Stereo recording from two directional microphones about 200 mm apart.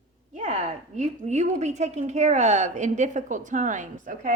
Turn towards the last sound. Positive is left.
turn(degrees=-40)  # may be behind; listen again after turning